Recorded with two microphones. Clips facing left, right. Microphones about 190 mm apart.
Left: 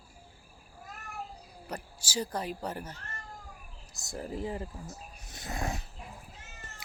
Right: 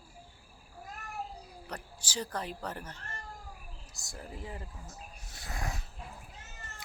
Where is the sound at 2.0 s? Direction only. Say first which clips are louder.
Left 3 dB; 10° left (ahead or behind).